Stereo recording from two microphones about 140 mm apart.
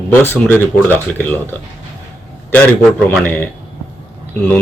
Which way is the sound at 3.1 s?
10° left (ahead or behind).